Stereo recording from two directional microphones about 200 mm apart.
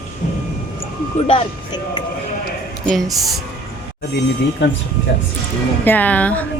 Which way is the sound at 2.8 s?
Centre (ahead or behind).